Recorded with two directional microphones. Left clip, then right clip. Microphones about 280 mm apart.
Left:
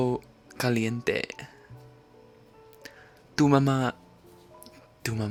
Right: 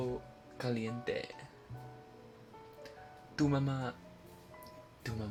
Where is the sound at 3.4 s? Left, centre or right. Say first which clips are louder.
Left 12 dB; left.